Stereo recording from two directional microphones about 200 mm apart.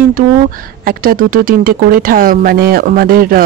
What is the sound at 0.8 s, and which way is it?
Speech, 45° right (ahead or behind).